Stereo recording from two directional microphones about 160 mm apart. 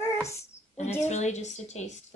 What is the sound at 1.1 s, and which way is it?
Speech, 45° left (ahead or behind).